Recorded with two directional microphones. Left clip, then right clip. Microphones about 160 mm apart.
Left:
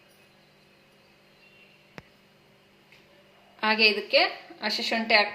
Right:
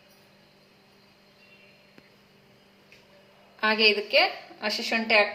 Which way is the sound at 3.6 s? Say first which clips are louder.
Even; 30° left (ahead or behind).